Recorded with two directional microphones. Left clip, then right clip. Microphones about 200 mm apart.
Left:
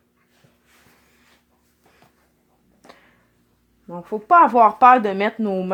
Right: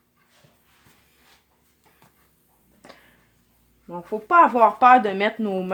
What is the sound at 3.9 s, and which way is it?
Speech, 25° left (ahead or behind).